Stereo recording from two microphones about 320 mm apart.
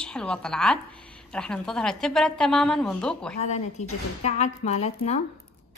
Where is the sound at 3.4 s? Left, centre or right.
Left.